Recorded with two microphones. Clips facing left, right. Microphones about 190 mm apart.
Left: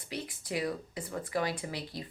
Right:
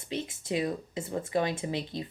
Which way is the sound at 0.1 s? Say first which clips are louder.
Right 4 dB; 25° right (ahead or behind).